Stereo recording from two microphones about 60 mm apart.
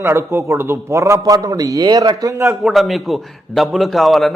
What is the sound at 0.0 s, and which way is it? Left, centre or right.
A man's voice, right.